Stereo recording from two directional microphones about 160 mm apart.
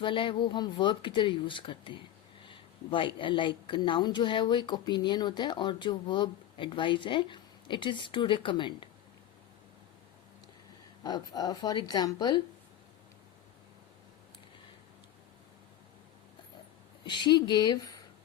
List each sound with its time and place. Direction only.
0.0 s speech: 30° left (ahead or behind)
11.0 s speech: 25° left (ahead or behind)
17.0 s speech: 30° left (ahead or behind)